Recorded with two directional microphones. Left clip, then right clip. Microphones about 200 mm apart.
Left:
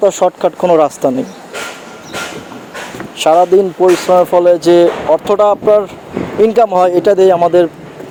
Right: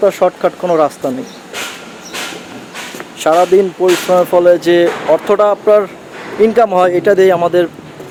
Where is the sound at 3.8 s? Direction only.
5° left (ahead or behind).